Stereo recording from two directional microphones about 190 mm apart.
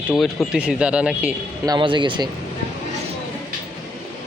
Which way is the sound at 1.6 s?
25° right (ahead or behind).